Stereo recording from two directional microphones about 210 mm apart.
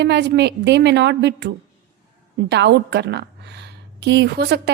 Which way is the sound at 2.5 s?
55° right (ahead or behind).